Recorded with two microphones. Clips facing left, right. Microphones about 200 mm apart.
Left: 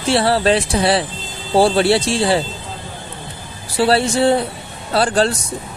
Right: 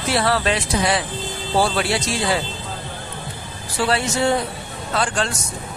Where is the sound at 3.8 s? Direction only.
30° left (ahead or behind).